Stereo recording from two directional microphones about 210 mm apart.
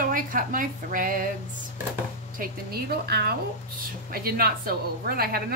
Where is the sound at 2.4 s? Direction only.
45° right (ahead or behind).